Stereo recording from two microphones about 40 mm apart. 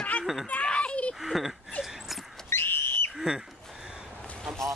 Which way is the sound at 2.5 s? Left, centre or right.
Left.